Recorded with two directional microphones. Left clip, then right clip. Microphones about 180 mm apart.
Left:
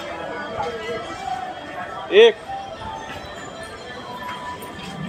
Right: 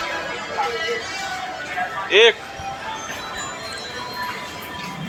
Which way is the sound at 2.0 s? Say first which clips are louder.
Left 1 dB; 25° left (ahead or behind).